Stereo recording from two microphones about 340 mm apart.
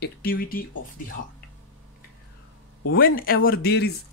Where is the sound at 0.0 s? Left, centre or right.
Left.